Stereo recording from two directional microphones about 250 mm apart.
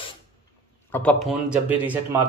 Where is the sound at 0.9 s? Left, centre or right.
Centre.